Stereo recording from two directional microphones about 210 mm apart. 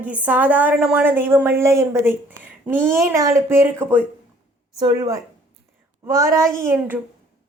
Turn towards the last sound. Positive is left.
turn(degrees=-10)  # may be behind; listen again after turning